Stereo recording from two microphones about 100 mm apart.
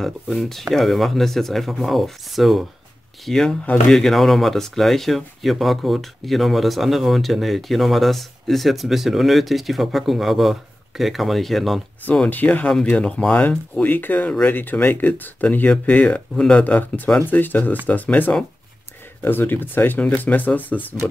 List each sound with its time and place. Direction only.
0.0 s speech: centre (ahead or behind)
12.3 s speech: 15° left (ahead or behind)